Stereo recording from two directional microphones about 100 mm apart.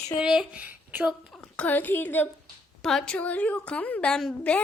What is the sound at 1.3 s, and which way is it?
A woman's voice, 10° left (ahead or behind).